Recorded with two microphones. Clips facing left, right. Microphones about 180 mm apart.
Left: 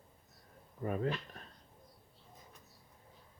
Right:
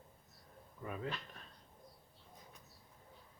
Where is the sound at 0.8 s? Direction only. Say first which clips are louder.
Left 8 dB; 45° left (ahead or behind).